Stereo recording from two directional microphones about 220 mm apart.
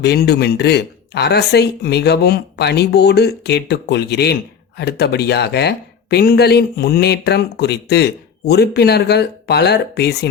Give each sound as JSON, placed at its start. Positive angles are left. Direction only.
{"t": 0.0, "sound": "speech", "side_deg": 50}